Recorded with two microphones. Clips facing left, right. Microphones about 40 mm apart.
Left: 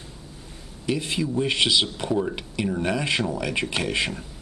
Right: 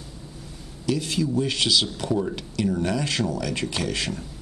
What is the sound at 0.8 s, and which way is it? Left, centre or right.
Speech, left.